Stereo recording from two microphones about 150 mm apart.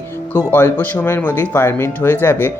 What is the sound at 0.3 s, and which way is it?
Speech, 15° left (ahead or behind).